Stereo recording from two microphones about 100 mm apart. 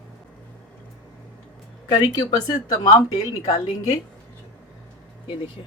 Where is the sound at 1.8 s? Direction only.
40° left (ahead or behind).